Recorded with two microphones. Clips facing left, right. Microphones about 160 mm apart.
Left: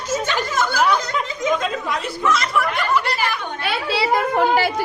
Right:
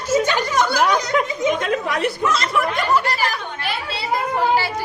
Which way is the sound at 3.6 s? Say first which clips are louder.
Left 5 dB; 70° left (ahead or behind).